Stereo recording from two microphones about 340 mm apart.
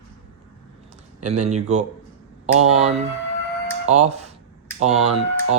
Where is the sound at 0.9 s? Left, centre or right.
Centre.